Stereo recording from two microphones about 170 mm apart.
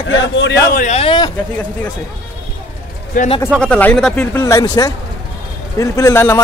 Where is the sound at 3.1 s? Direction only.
50° left (ahead or behind).